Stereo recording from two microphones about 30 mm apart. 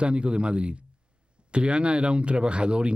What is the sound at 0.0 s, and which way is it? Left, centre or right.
Speech, right.